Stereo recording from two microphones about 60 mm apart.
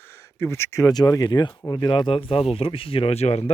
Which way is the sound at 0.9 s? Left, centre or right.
Left.